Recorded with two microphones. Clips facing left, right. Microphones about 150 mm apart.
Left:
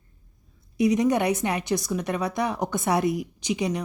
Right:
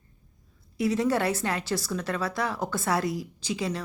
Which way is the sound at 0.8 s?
15° left (ahead or behind).